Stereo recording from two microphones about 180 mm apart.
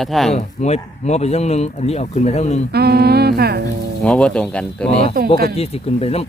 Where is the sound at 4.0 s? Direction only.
5° left (ahead or behind).